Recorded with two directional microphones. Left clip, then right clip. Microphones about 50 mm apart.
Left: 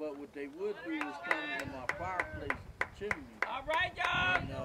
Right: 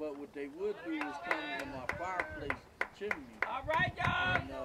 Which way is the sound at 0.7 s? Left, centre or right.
Centre.